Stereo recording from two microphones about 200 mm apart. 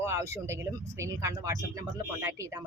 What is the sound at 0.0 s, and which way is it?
A woman's voice, 15° right (ahead or behind).